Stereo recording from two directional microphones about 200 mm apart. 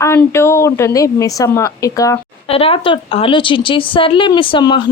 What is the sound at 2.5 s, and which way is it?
A woman's voice, 30° left (ahead or behind).